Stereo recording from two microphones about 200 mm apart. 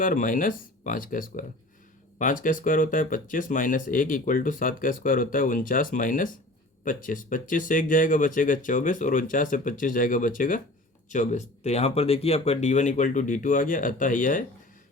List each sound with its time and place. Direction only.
0.0 s speech: 45° left (ahead or behind)